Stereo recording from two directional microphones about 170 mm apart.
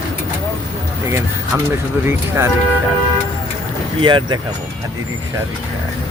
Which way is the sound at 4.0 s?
25° right (ahead or behind).